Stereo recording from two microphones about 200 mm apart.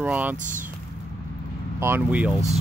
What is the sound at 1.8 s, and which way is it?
Speech, 10° right (ahead or behind).